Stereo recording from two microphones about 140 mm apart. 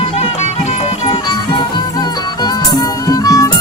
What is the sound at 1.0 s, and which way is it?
Music, 35° left (ahead or behind).